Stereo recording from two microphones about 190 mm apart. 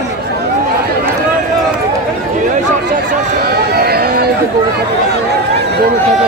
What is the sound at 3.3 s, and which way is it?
Run, 55° right (ahead or behind).